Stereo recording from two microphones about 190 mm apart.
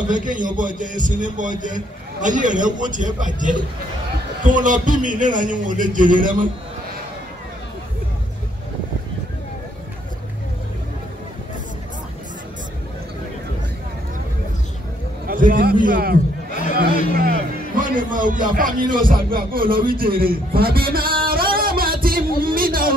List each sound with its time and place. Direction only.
0.1 s a man's voice: 45° right (ahead or behind)
15.2 s a sound: 45° right (ahead or behind)
17.2 s music: 50° right (ahead or behind)